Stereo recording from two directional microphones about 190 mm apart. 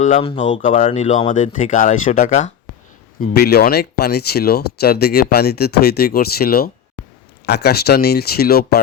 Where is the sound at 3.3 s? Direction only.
55° left (ahead or behind).